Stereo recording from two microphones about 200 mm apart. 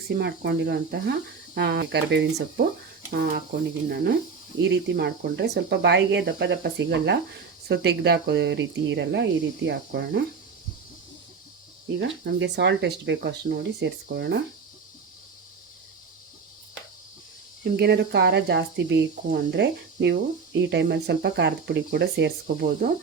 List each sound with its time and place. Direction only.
0.2 s speech: 55° right (ahead or behind)
3.1 s speech: 45° right (ahead or behind)
11.9 s speech: 60° right (ahead or behind)
17.6 s speech: 55° right (ahead or behind)